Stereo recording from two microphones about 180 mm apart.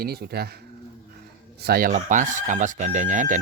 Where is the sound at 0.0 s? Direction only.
60° right (ahead or behind).